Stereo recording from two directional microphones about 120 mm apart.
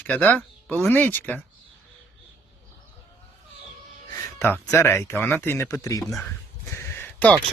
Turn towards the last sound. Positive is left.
turn(degrees=15)  # may be behind; listen again after turning